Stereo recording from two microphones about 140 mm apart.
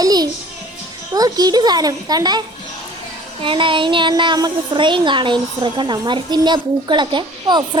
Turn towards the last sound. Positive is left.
turn(degrees=-35)  # may be behind; listen again after turning